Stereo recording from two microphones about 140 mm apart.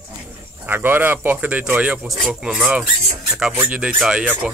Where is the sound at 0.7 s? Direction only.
15° right (ahead or behind).